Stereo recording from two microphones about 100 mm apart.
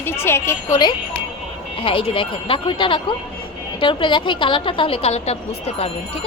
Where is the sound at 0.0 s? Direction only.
25° left (ahead or behind).